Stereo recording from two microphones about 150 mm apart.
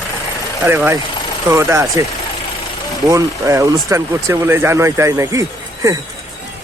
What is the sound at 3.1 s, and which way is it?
Speech, 20° right (ahead or behind).